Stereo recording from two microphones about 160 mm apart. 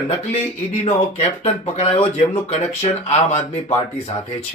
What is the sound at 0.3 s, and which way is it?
Speech, 40° left (ahead or behind).